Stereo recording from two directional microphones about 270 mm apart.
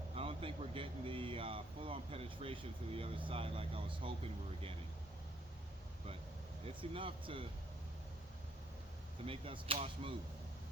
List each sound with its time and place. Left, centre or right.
0.2 s a sound: right
3.2 s speech: centre
6.7 s speech: centre
9.2 s speech: centre